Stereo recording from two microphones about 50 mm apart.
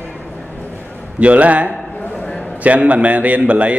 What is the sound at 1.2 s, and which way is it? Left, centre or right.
Speech, right.